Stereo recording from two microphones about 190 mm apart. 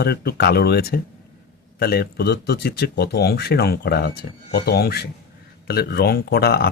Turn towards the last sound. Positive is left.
turn(degrees=55)  # may be behind; listen again after turning